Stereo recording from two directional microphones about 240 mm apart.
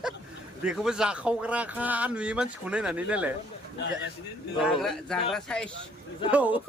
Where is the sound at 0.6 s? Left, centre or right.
Centre.